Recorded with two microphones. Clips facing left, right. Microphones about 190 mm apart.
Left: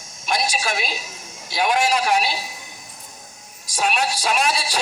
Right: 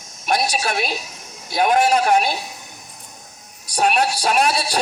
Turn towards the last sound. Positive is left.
turn(degrees=-60)  # may be behind; listen again after turning